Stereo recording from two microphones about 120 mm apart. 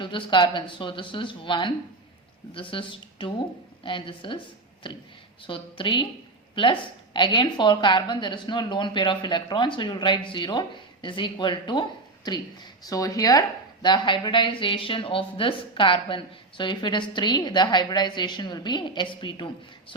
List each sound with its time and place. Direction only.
0.0 s a woman's voice: 40° left (ahead or behind)